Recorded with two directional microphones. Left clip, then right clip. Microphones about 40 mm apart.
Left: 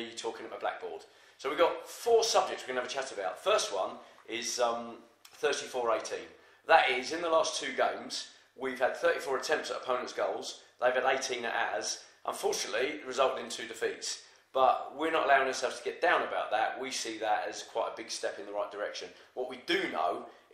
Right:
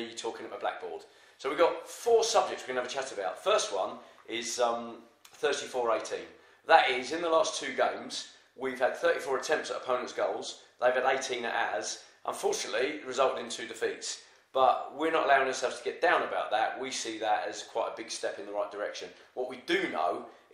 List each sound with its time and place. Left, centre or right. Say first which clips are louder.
0.0 s a man's voice: right 1 dB; centre